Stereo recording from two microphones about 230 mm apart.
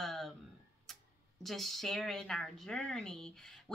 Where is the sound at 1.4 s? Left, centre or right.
Centre.